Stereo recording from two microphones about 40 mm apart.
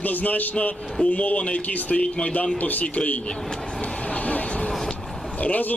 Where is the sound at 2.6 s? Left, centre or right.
Left.